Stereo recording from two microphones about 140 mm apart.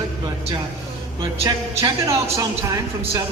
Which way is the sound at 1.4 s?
25° right (ahead or behind).